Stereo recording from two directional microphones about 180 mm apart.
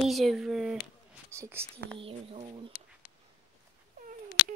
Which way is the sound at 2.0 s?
30° right (ahead or behind).